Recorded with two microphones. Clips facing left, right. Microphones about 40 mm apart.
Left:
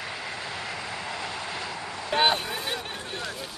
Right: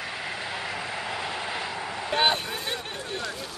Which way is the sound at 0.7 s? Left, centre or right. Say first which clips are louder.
Right 2 dB; centre.